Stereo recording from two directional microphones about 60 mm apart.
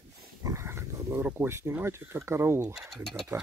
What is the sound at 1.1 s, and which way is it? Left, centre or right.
Speech, right.